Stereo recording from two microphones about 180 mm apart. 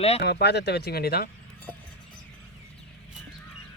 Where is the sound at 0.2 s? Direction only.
65° left (ahead or behind).